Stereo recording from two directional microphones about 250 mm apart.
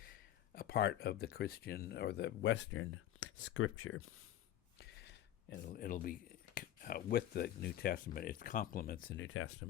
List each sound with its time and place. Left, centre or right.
0.5 s speech: left
4.8 s a sound: left
5.6 s speech: left